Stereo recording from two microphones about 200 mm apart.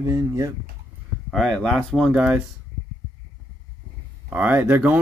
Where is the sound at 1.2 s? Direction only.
Centre (ahead or behind).